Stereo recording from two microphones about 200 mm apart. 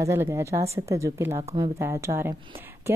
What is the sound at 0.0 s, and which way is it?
A woman's voice, 15° right (ahead or behind).